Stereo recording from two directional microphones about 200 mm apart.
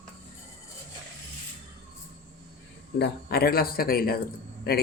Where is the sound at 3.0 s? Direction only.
50° left (ahead or behind).